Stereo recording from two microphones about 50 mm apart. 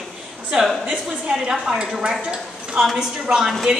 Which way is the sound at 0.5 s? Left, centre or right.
Centre.